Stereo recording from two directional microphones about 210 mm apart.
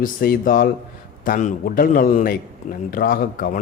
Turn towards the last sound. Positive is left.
turn(degrees=40)  # may be behind; listen again after turning